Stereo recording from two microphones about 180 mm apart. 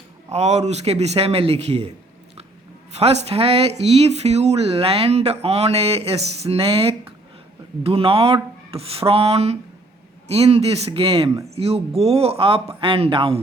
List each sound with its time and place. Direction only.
0.3 s speech: 40° right (ahead or behind)
2.9 s speech: 35° right (ahead or behind)